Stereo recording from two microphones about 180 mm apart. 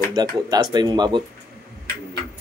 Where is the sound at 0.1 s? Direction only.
20° right (ahead or behind).